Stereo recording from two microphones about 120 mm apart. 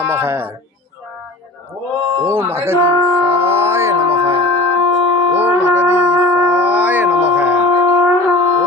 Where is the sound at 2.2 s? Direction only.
20° right (ahead or behind).